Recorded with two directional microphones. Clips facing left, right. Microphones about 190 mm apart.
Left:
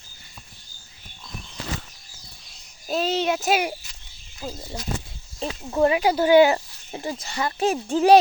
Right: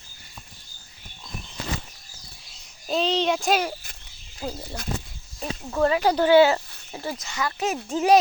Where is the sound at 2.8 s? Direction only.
5° left (ahead or behind).